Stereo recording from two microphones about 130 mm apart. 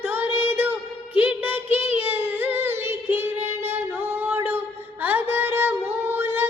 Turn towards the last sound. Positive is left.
turn(degrees=-15)  # may be behind; listen again after turning